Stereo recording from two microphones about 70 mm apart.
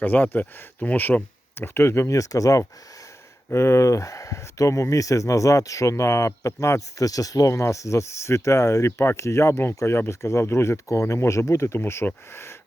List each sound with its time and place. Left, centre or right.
0.0 s speech: left
2.1 s speech: left
3.5 s speech: left